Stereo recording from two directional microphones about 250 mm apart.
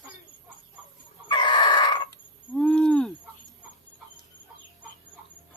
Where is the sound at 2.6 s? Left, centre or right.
Centre.